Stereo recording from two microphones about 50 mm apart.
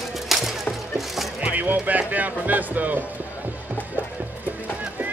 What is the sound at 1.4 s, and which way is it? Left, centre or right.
Speech, right.